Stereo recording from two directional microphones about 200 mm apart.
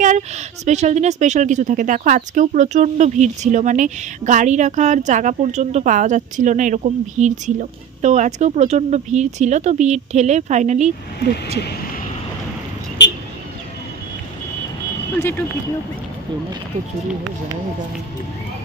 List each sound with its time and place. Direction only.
0.0 s a woman's voice: 35° right (ahead or behind)
11.6 s speech: 50° left (ahead or behind)
13.0 s a sound: 60° left (ahead or behind)